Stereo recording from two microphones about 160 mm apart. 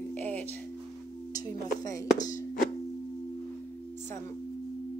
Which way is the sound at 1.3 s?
20° left (ahead or behind).